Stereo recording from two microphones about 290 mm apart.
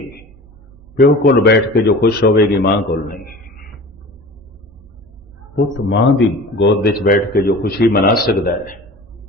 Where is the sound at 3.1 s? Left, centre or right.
Left.